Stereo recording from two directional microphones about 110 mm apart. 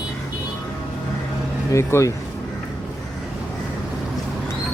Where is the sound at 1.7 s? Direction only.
25° left (ahead or behind).